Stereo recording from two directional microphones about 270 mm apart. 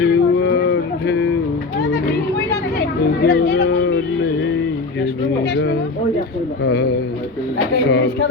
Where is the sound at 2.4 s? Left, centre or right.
Left.